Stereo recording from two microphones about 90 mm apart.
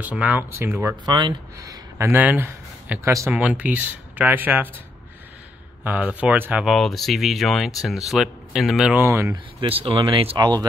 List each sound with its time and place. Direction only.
0.0 s speech: 20° right (ahead or behind)
1.0 s speech: 55° right (ahead or behind)
1.6 s a sound: 40° right (ahead or behind)
2.0 s speech: 20° right (ahead or behind)
5.9 s speech: 15° right (ahead or behind)
6.6 s speech: centre (ahead or behind)
8.9 s speech: 30° right (ahead or behind)
9.3 s speech: 75° right (ahead or behind); by 10.6 s 55° right (ahead or behind)